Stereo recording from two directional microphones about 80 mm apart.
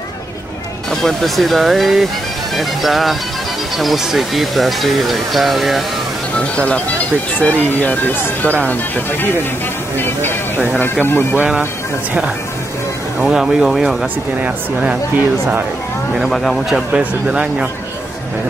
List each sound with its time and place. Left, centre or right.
1.0 s speech: centre
6.3 s speech: centre
13.2 s speech: centre
14.4 s speech: centre
16.2 s speech: centre
16.9 s speech: centre